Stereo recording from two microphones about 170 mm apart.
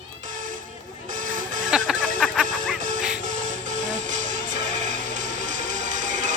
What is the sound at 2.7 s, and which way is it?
Music, 45° right (ahead or behind).